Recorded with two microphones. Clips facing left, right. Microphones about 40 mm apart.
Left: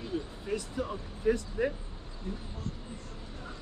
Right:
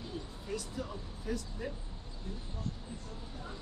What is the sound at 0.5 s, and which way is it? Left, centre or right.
Speech, left.